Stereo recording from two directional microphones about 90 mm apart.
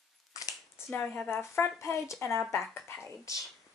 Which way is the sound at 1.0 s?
10° left (ahead or behind).